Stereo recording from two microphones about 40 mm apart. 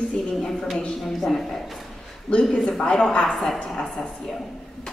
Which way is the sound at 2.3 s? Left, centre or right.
Left.